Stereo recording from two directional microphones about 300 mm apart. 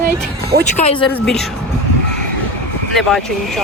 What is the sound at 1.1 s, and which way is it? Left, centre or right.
Speech, centre.